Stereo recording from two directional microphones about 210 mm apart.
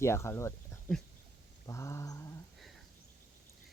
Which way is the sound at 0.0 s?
15° left (ahead or behind).